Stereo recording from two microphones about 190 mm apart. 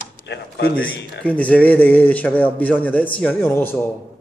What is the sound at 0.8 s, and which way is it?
A man's voice, 5° left (ahead or behind).